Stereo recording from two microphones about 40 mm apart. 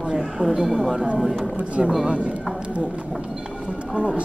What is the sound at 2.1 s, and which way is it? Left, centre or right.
Speech, right.